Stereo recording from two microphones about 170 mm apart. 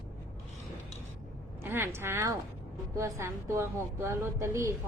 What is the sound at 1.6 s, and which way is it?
A woman's voice, 10° right (ahead or behind).